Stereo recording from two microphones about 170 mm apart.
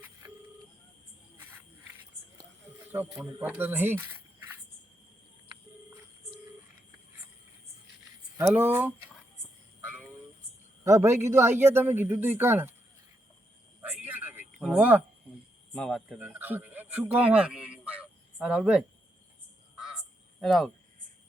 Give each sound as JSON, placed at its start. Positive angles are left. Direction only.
{"t": 1.4, "sound": "cricket", "side_deg": -15}
{"t": 2.9, "sound": "a man's voice", "side_deg": -15}
{"t": 8.4, "sound": "a man's voice", "side_deg": -10}
{"t": 10.8, "sound": "a man's voice", "side_deg": -15}
{"t": 13.8, "sound": "a sound", "side_deg": -10}
{"t": 15.7, "sound": "speech", "side_deg": 5}
{"t": 20.4, "sound": "speech", "side_deg": 0}